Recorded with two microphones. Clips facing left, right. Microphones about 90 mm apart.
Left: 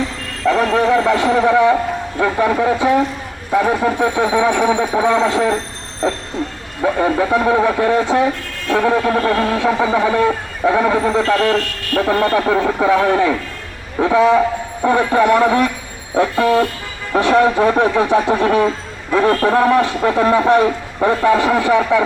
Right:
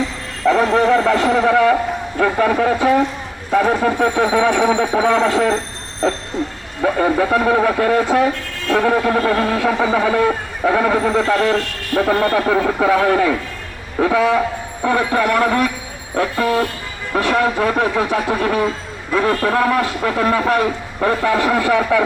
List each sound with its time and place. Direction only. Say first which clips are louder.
0.4 s bow-wow: right 1 dB; 5° right (ahead or behind)
0.8 s a man's voice: even; 5° left (ahead or behind)
1.5 s a man's voice: left 2 dB; 15° left (ahead or behind)
1.7 s a man's voice: left 1 dB; centre (ahead or behind)
6.0 s a man's voice: even; 10° left (ahead or behind)
6.8 s a man's voice: even; centre (ahead or behind)
17.1 s a man's voice: left 3 dB; 15° left (ahead or behind)
17.7 s a man's voice: left 4 dB; centre (ahead or behind)
21.9 s speech: even; 20° left (ahead or behind)